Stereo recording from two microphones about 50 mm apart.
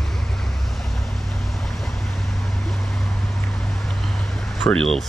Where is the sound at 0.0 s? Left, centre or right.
Centre.